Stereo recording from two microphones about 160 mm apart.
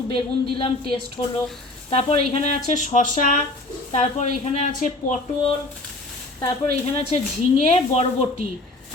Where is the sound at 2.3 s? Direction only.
45° left (ahead or behind).